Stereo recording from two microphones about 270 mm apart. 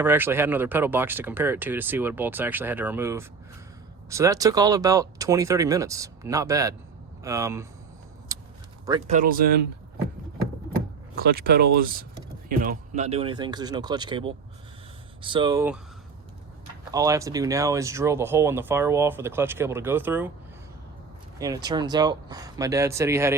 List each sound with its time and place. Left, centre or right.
0.0 s speech: centre
8.3 s vehicle: centre
8.9 s speech: right
11.2 s speech: right; by 15.8 s centre
16.9 s speech: centre
21.3 s speech: centre